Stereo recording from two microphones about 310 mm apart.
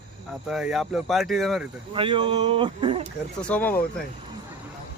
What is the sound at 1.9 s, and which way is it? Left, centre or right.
Speech, centre.